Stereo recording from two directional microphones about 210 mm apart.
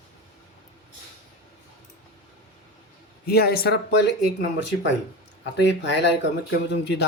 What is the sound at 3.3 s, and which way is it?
Speech, 50° left (ahead or behind).